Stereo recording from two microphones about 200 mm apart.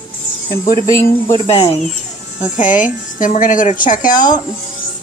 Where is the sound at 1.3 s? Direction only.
30° left (ahead or behind).